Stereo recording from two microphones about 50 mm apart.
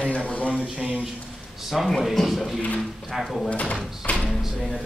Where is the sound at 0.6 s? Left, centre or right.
Right.